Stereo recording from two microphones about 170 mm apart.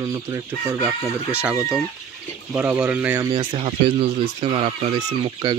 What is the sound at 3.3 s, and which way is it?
Speech, 30° right (ahead or behind).